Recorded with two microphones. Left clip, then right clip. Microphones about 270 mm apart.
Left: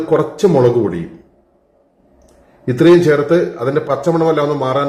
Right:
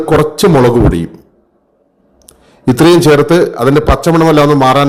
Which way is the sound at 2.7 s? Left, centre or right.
Right.